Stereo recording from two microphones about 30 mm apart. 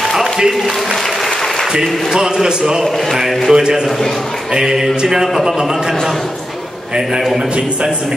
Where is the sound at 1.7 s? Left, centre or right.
Right.